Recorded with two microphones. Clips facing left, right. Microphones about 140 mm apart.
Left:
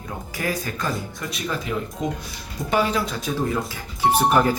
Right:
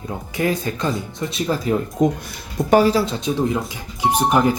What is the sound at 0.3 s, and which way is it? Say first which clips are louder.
Speech: right 6 dB; 25° right (ahead or behind).